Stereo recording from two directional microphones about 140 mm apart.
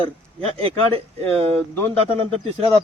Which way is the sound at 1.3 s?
45° right (ahead or behind).